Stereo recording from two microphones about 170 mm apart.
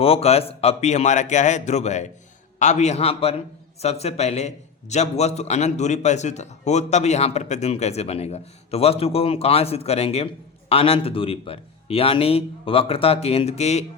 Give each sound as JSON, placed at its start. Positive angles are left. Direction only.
{"t": 0.0, "sound": "a man's voice", "side_deg": 35}